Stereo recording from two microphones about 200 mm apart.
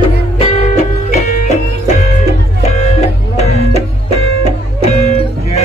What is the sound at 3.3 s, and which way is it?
Music, 30° left (ahead or behind).